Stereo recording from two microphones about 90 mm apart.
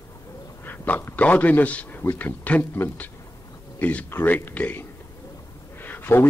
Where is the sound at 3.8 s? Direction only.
20° left (ahead or behind).